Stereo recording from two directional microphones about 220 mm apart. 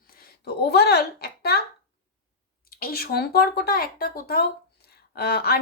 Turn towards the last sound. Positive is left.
turn(degrees=45)  # may be behind; listen again after turning